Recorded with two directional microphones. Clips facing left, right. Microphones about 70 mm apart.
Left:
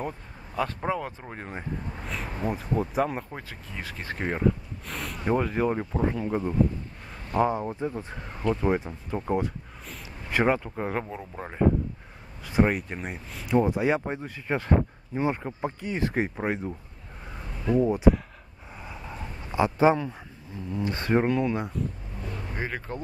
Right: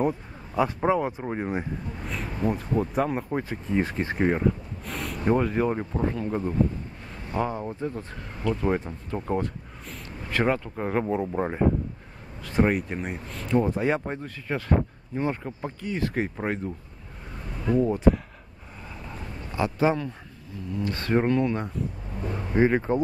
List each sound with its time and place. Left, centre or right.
0.6 s speech: centre
2.0 s speech: centre
3.3 s speech: right
4.2 s speech: centre
6.0 s speech: centre
11.1 s speech: centre
12.4 s speech: centre; by 16.3 s left
16.3 s speech: centre
19.5 s speech: left
21.2 s speech: centre
22.6 s speech: right